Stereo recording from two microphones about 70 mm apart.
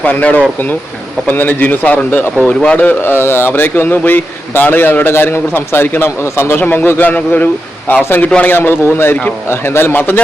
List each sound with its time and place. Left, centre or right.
0.0 s a man's voice: left